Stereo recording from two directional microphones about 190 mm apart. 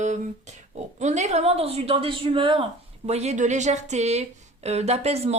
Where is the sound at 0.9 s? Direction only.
35° right (ahead or behind).